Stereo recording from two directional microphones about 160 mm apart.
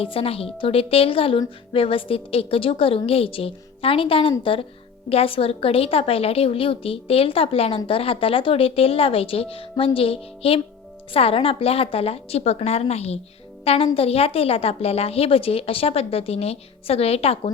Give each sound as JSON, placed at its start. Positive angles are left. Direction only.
{"t": 0.0, "sound": "a woman's voice", "side_deg": 35}